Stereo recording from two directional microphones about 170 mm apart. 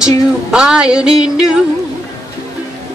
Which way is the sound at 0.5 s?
5° right (ahead or behind).